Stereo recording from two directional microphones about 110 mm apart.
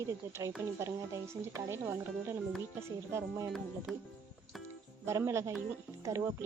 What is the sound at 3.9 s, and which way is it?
Speech, centre (ahead or behind).